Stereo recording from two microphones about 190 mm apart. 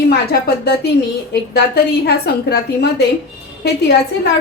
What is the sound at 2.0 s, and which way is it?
A woman's voice, 55° left (ahead or behind).